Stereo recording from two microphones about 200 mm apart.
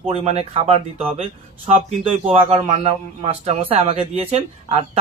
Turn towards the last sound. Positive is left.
turn(degrees=-30)  # may be behind; listen again after turning